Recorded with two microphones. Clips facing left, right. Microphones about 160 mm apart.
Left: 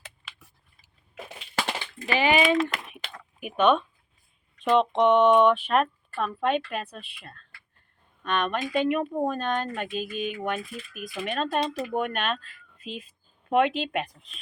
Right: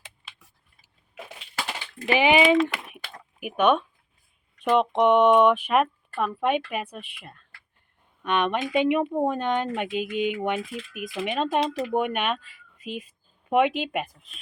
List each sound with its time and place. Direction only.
2.0 s speech: 15° right (ahead or behind)